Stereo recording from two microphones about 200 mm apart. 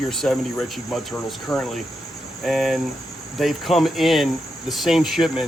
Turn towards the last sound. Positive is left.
turn(degrees=0)  # may be behind; listen again after turning